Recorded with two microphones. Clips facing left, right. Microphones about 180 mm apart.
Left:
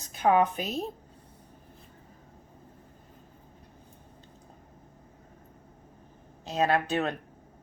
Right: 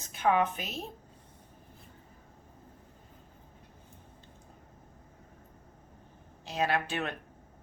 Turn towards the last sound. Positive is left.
turn(degrees=35)  # may be behind; listen again after turning